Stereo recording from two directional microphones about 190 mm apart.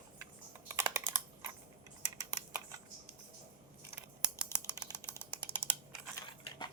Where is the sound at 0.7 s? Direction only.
15° right (ahead or behind).